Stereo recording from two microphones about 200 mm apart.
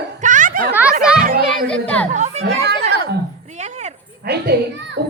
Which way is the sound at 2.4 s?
55° right (ahead or behind).